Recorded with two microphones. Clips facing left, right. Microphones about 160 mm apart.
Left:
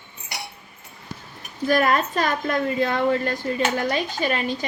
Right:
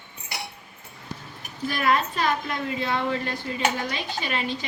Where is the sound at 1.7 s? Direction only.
45° left (ahead or behind).